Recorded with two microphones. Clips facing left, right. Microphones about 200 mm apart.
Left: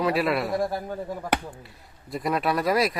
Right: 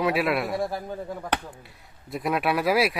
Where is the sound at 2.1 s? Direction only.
Centre (ahead or behind).